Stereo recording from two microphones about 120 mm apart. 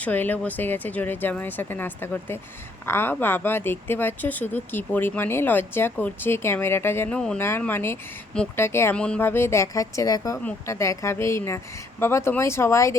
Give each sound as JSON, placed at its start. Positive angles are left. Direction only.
{"t": 0.0, "sound": "a woman's voice", "side_deg": 15}
{"t": 9.0, "sound": "a woman's voice", "side_deg": 10}